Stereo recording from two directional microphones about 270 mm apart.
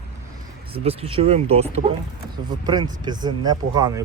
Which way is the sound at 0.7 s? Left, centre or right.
Right.